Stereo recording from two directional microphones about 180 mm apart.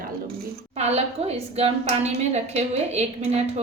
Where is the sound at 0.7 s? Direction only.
35° right (ahead or behind).